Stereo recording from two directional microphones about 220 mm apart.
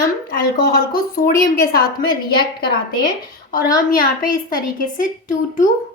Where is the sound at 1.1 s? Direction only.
40° left (ahead or behind).